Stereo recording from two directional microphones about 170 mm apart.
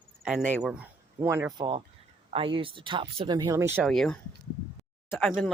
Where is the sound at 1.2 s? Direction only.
15° right (ahead or behind); by 3.3 s 30° right (ahead or behind).